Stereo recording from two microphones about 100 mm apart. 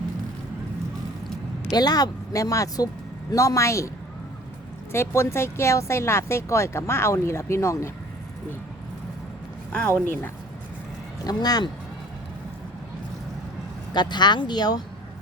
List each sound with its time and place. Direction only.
1.7 s speech: 40° left (ahead or behind)
4.9 s speech: 25° left (ahead or behind)
9.7 s speech: 20° left (ahead or behind)
11.2 s speech: 40° left (ahead or behind)
13.9 s speech: 45° left (ahead or behind)